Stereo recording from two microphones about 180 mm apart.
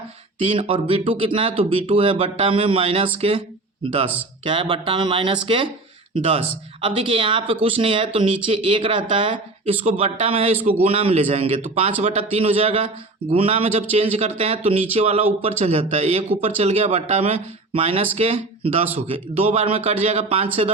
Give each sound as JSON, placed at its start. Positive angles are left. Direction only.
{"t": 0.4, "sound": "speech", "side_deg": -30}
{"t": 4.4, "sound": "speech", "side_deg": -25}